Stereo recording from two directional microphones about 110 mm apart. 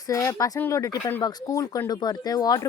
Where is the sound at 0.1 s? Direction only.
30° left (ahead or behind).